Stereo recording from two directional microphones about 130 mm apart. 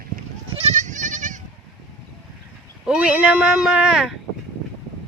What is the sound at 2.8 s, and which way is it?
Speech, 5° right (ahead or behind).